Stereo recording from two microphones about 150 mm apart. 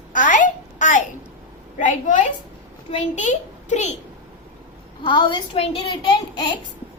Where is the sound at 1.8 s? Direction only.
60° left (ahead or behind).